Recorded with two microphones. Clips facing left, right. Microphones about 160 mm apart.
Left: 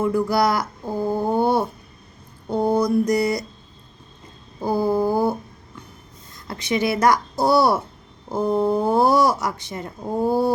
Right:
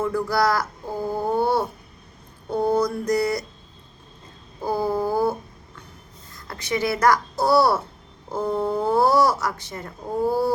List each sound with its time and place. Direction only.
0.0 s speech: 15° left (ahead or behind)
1.1 s a sound: 15° left (ahead or behind)
2.5 s speech: 15° left (ahead or behind)
4.6 s speech: 15° left (ahead or behind)
6.3 s speech: 20° left (ahead or behind)